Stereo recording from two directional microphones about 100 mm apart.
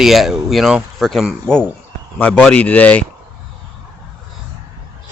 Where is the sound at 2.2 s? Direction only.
15° left (ahead or behind).